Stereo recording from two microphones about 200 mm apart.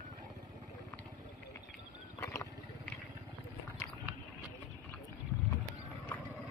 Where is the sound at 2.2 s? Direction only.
15° left (ahead or behind).